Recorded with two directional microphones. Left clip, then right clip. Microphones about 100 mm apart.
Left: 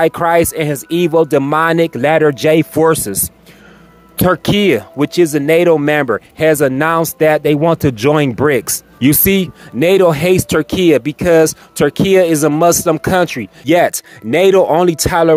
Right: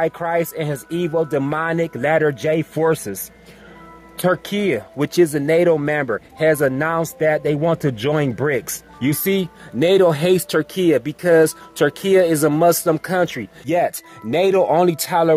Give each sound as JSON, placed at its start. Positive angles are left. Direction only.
{"t": 0.0, "sound": "speech", "side_deg": 45}
{"t": 1.1, "sound": "speech", "side_deg": 50}
{"t": 1.5, "sound": "speech", "side_deg": 40}
{"t": 2.0, "sound": "speech", "side_deg": 30}
{"t": 2.5, "sound": "speech", "side_deg": 45}
{"t": 4.2, "sound": "speech", "side_deg": 30}
{"t": 5.1, "sound": "speech", "side_deg": 20}
{"t": 5.9, "sound": "speech", "side_deg": 30}
{"t": 6.3, "sound": "speech", "side_deg": 20}
{"t": 6.8, "sound": "speech", "side_deg": 35}
{"t": 9.8, "sound": "speech", "side_deg": 20}
{"t": 14.3, "sound": "speech", "side_deg": 30}